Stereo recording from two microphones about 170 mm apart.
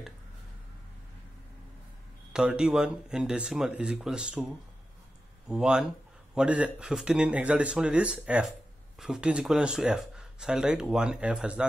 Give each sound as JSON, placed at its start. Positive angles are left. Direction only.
{"t": 2.3, "sound": "speech", "side_deg": -5}
{"t": 5.5, "sound": "speech", "side_deg": -5}